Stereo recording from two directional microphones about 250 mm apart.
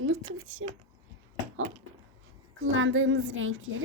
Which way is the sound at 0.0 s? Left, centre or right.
Right.